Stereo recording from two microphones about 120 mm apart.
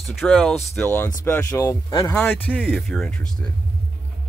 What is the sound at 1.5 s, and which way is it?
Speech, 30° left (ahead or behind).